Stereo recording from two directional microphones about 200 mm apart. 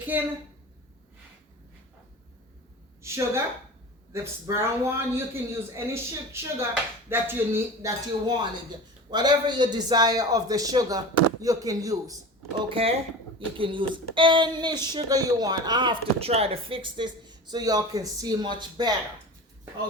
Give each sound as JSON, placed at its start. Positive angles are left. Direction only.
{"t": 0.1, "sound": "a man's voice", "side_deg": -10}
{"t": 3.0, "sound": "a woman's voice", "side_deg": -15}
{"t": 12.6, "sound": "speech", "side_deg": -30}